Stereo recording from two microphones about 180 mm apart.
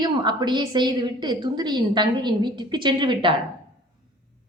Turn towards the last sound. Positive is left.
turn(degrees=-25)  # may be behind; listen again after turning